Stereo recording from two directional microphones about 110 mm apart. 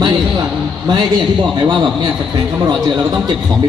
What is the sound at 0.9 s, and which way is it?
A man's voice, 45° right (ahead or behind).